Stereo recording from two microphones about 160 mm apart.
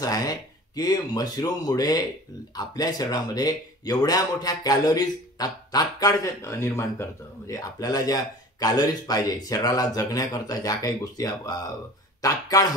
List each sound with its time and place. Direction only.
0.0 s speech: 25° left (ahead or behind)